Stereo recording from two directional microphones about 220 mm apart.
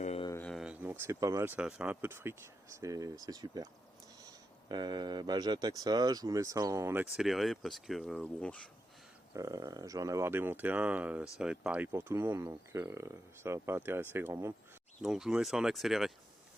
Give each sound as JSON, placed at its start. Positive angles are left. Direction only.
{"t": 0.0, "sound": "a sound", "side_deg": 30}
{"t": 0.3, "sound": "speech", "side_deg": 5}
{"t": 4.7, "sound": "speech", "side_deg": -20}
{"t": 9.3, "sound": "speech", "side_deg": -15}